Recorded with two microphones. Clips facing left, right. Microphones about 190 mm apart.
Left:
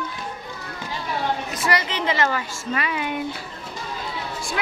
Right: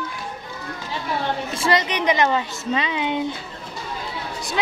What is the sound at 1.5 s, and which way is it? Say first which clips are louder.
A woman's voice: right 3 dB; 25° right (ahead or behind).